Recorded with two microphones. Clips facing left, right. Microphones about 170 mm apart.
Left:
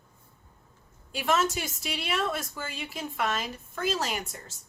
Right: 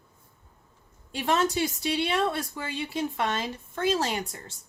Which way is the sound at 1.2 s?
30° right (ahead or behind).